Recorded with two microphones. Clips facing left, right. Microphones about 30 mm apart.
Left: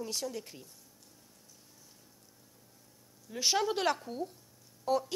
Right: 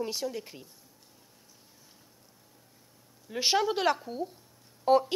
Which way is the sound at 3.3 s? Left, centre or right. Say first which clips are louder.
Right 3 dB; right.